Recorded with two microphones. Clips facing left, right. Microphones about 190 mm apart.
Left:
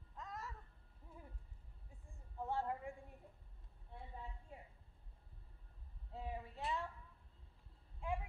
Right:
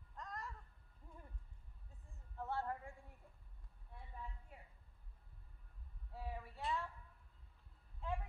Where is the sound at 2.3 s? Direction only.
15° left (ahead or behind).